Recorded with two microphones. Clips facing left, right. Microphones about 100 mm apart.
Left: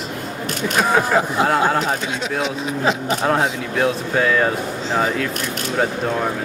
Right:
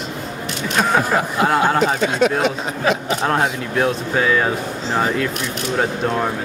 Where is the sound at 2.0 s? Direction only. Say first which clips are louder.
Right 8 dB; 60° right (ahead or behind).